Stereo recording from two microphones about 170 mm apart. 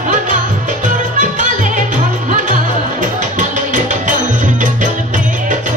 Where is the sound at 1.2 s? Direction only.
50° right (ahead or behind).